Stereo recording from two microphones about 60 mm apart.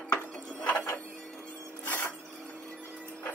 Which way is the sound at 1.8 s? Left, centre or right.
Left.